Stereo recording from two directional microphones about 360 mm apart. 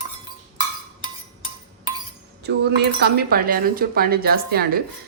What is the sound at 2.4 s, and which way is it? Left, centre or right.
Speech, right.